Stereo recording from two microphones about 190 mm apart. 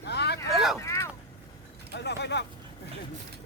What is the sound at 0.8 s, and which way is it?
Vehicle, 15° left (ahead or behind).